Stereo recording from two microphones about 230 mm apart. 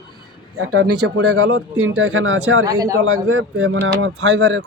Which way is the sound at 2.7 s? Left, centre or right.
Centre.